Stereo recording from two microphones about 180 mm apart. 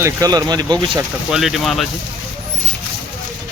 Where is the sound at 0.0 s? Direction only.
20° right (ahead or behind).